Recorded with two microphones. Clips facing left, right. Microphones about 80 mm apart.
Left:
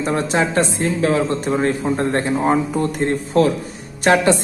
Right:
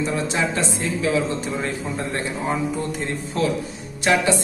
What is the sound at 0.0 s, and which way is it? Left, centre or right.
A man's voice, left.